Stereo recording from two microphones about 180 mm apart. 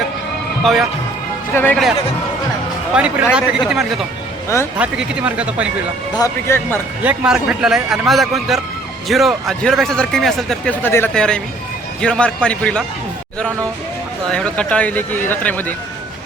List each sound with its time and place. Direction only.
0.6 s speech: centre (ahead or behind)
1.5 s speech: 10° left (ahead or behind)
2.9 s a man's voice: 5° right (ahead or behind)
6.1 s speech: 15° left (ahead or behind)
7.0 s a man's voice: 5° right (ahead or behind)
14.3 s speech: 5° left (ahead or behind)